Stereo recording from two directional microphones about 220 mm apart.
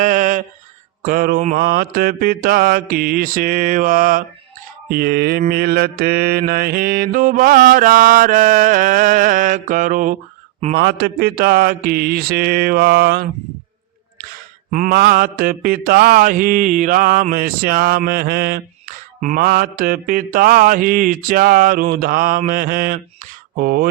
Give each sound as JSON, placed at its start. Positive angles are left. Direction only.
{"t": 0.0, "sound": "a sound", "side_deg": -35}
{"t": 1.0, "sound": "mantra", "side_deg": -40}
{"t": 14.7, "sound": "mantra", "side_deg": -40}